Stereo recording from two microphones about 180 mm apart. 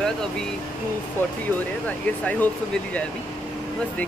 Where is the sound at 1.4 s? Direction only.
10° left (ahead or behind).